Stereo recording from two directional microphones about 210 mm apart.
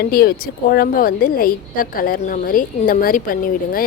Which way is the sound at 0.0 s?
45° left (ahead or behind).